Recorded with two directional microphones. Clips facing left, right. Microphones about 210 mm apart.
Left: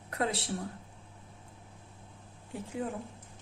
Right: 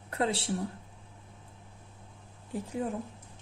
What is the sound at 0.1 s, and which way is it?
Speech, 30° right (ahead or behind).